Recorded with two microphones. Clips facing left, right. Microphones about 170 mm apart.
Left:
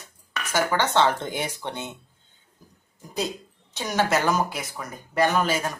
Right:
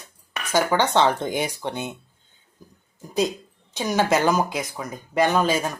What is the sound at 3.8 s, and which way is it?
Speech, 15° right (ahead or behind).